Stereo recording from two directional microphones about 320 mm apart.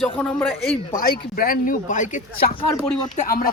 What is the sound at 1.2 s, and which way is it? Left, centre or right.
Speech, left.